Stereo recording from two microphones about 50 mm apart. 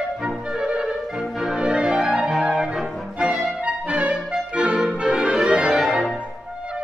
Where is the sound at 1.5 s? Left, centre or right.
Centre.